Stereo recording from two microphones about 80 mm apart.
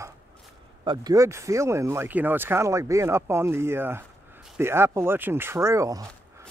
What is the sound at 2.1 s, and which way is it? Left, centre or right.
Speech, right.